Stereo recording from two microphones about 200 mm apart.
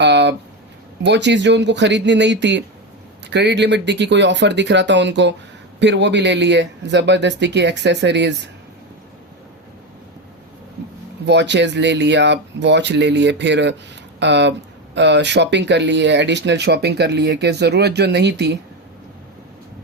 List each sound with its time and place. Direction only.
0.0 s a sound: 60° right (ahead or behind)
1.0 s speech: 60° right (ahead or behind)
11.3 s speech: 60° right (ahead or behind)